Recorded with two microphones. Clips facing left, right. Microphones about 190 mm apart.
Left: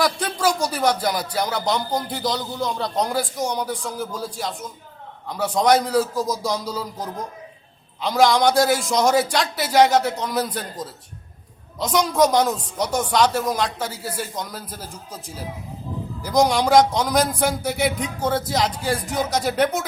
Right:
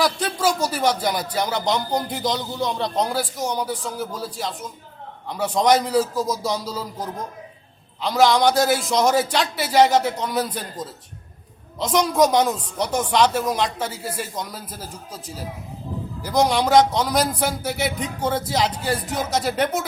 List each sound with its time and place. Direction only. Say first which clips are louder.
0.0 s a man's voice: even; centre (ahead or behind)
16.2 s a man's voice: left 1 dB; 5° right (ahead or behind)